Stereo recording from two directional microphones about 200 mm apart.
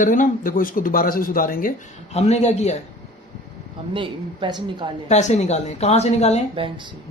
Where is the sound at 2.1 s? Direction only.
35° left (ahead or behind).